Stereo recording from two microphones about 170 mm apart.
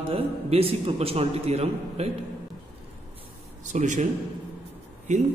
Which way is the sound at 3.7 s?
45° right (ahead or behind).